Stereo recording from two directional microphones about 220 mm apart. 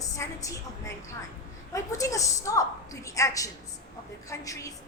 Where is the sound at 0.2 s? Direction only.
15° left (ahead or behind).